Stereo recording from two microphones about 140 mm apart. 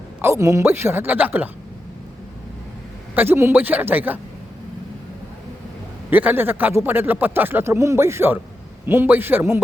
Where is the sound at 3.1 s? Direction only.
15° right (ahead or behind).